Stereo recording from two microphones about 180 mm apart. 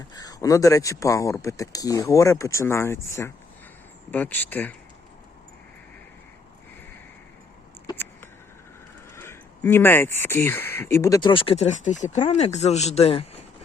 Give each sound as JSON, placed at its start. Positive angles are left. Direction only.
{"t": 0.1, "sound": "speech", "side_deg": 20}
{"t": 9.1, "sound": "speech", "side_deg": 15}